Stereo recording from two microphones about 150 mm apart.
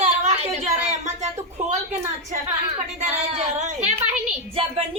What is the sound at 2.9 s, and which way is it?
Child singing, 50° right (ahead or behind).